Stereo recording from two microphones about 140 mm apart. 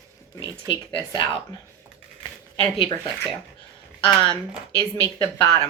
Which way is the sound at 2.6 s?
40° left (ahead or behind).